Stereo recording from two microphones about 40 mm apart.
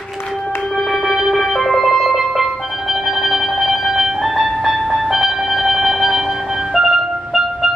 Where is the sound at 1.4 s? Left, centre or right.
Centre.